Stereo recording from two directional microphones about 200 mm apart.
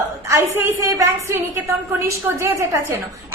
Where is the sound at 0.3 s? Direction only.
10° right (ahead or behind).